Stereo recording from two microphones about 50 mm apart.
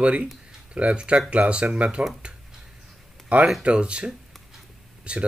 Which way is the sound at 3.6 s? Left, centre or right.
Right.